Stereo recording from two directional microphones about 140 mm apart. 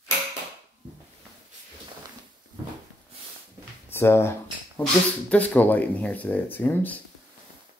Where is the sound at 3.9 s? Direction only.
15° left (ahead or behind).